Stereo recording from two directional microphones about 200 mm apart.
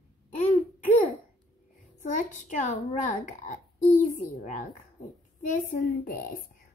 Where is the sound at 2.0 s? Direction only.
40° left (ahead or behind).